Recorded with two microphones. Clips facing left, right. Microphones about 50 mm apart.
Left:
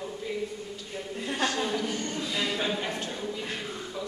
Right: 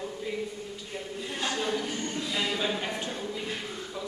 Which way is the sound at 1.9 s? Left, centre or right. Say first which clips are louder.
Left 1 dB; right.